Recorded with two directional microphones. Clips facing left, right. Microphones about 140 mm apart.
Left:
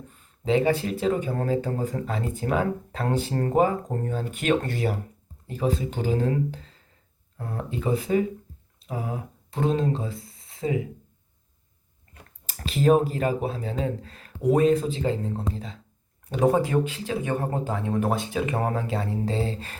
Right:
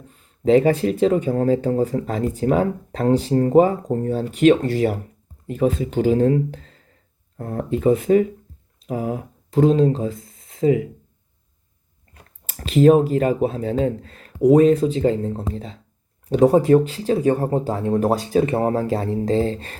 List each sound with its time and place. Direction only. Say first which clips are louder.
0.4 s speech: right 7 dB; 40° right (ahead or behind)
5.5 s speech: right 6 dB; 35° left (ahead or behind)
6.0 s speech: right 10 dB; 40° right (ahead or behind)
13.1 s speech: right 7 dB; 40° right (ahead or behind)